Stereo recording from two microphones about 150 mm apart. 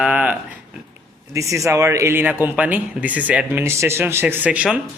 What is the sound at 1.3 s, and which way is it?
A man's voice, 20° right (ahead or behind).